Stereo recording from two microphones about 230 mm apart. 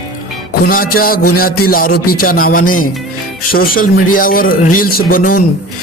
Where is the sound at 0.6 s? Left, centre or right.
Left.